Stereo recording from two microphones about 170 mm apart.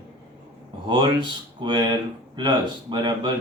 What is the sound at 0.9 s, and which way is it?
Speech, 30° right (ahead or behind).